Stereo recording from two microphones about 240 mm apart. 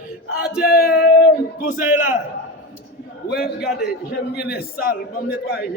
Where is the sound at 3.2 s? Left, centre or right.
Left.